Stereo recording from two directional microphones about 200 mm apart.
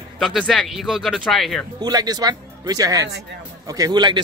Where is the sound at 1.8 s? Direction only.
20° right (ahead or behind).